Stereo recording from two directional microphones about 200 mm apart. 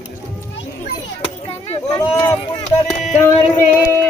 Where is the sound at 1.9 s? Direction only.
20° left (ahead or behind).